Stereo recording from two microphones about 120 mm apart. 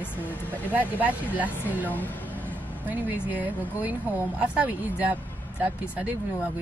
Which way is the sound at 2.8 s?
15° right (ahead or behind).